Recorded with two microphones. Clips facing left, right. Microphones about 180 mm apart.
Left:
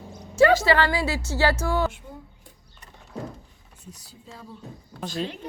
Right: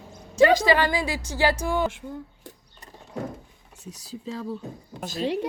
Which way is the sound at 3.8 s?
90° right.